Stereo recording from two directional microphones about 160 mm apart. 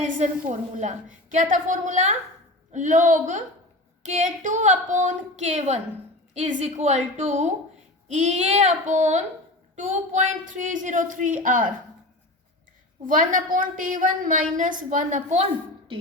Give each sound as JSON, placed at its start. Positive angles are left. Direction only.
{"t": 0.0, "sound": "a sound", "side_deg": -50}
{"t": 0.8, "sound": "speech", "side_deg": -50}
{"t": 13.1, "sound": "a woman's voice", "side_deg": -55}